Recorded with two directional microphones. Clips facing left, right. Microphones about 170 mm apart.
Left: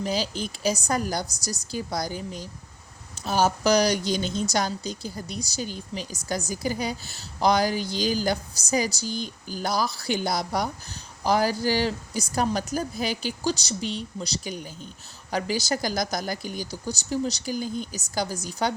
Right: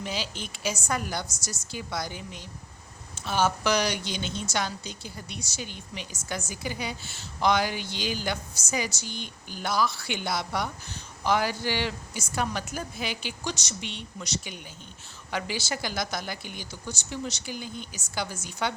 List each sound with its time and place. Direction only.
0.0 s speech: 40° left (ahead or behind)